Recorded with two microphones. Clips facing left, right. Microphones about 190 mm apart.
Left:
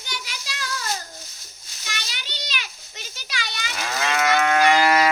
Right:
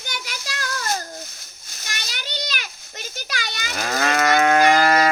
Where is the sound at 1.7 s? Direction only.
45° right (ahead or behind).